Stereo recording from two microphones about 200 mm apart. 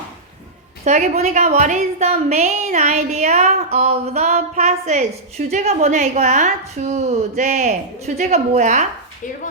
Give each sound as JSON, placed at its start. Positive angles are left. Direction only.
{"t": 0.9, "sound": "a woman's voice", "side_deg": -35}